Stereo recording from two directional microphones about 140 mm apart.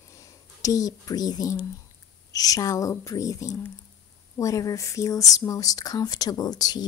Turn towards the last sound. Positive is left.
turn(degrees=30)  # may be behind; listen again after turning